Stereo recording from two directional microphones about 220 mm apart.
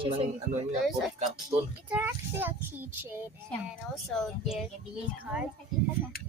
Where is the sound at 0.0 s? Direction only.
25° right (ahead or behind).